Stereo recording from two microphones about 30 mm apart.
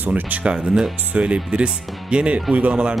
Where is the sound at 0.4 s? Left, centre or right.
Right.